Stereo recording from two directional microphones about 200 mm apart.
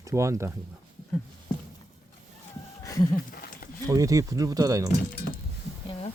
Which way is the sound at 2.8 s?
15° left (ahead or behind).